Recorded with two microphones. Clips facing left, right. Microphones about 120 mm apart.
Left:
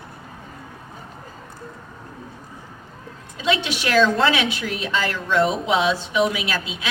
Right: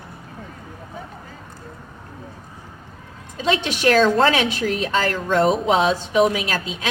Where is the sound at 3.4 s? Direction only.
40° right (ahead or behind).